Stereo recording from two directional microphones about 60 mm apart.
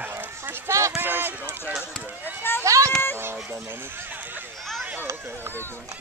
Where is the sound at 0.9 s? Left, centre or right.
Right.